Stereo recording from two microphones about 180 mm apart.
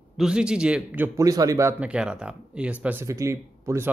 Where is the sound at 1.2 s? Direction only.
20° right (ahead or behind).